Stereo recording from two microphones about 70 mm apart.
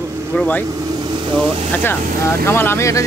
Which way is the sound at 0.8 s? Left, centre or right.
Right.